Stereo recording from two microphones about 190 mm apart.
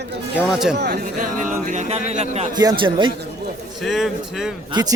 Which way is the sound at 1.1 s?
40° right (ahead or behind).